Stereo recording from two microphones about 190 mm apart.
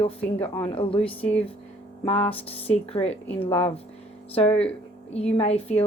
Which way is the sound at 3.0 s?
20° left (ahead or behind).